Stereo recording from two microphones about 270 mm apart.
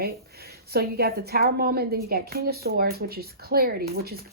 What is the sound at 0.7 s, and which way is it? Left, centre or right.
Speech, right.